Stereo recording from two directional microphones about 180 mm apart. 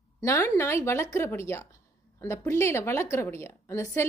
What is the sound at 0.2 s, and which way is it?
A woman's voice, 15° left (ahead or behind).